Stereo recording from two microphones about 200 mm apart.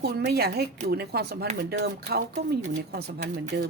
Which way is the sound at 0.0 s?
55° right (ahead or behind).